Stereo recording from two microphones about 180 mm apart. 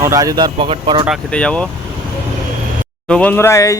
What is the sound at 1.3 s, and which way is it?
Speech, 5° left (ahead or behind).